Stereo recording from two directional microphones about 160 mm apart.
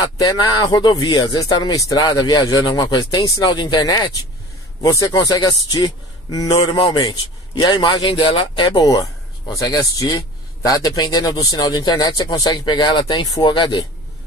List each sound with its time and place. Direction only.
0.2 s a man's voice: 25° left (ahead or behind)